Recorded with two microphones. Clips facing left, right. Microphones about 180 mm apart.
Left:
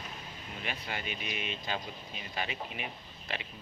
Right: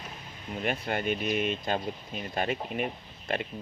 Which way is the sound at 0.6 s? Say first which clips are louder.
Right 10 dB; 50° right (ahead or behind).